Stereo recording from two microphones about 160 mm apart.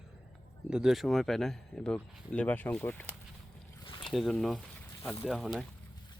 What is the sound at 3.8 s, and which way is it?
Boat, 30° left (ahead or behind).